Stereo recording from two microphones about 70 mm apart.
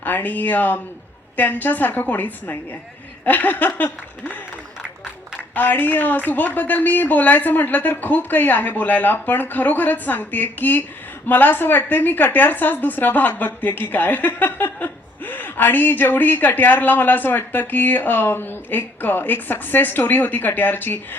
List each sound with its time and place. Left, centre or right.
0.0 s a woman's voice: left
5.5 s a woman's voice: left